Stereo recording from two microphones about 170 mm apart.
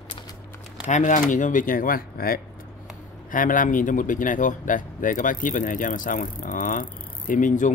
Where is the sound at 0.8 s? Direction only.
45° left (ahead or behind).